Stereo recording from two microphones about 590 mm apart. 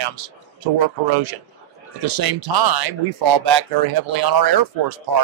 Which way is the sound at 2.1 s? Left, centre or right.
Right.